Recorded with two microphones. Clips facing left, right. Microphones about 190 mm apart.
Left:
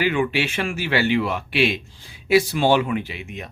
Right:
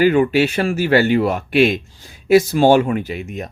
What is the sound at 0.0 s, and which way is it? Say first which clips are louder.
Speech: right 8 dB; 40° right (ahead or behind).